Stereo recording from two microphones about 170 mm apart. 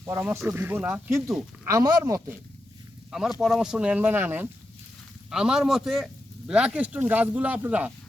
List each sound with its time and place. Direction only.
0.0 s speech: 15° right (ahead or behind)
1.6 s speech: 20° right (ahead or behind)
3.1 s a man's voice: centre (ahead or behind)